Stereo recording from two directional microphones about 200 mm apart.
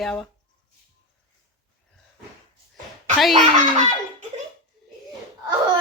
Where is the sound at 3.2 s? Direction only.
Centre (ahead or behind).